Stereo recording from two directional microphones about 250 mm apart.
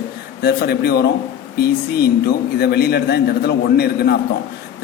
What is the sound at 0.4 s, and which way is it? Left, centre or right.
A man's voice, left.